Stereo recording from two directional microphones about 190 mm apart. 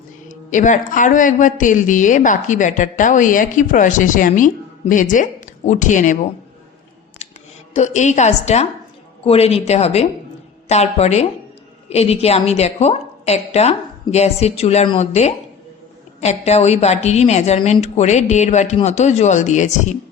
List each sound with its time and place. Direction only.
0.3 s speech: 40° left (ahead or behind)
7.7 s a woman's voice: 35° left (ahead or behind)